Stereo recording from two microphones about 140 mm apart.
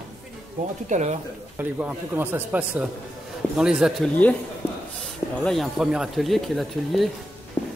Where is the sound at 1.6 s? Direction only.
10° right (ahead or behind).